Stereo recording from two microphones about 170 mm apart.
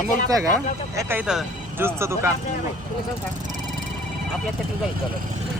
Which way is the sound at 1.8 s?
15° right (ahead or behind).